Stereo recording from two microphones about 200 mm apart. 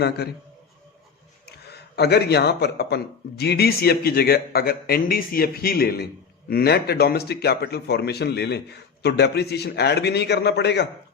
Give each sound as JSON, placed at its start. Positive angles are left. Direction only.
{"t": 1.5, "sound": "a man's voice", "side_deg": 55}